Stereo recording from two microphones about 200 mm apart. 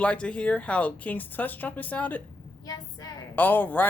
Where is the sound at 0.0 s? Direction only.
5° left (ahead or behind).